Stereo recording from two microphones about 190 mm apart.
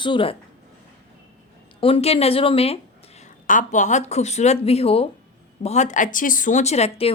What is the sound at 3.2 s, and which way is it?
A woman's voice, 40° left (ahead or behind).